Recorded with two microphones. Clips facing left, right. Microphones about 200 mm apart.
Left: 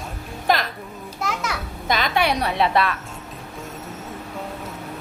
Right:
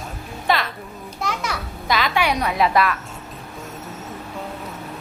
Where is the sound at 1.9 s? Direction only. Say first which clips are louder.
Right 1 dB; 45° left (ahead or behind).